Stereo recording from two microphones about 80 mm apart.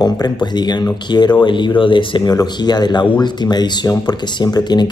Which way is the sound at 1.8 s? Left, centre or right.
Left.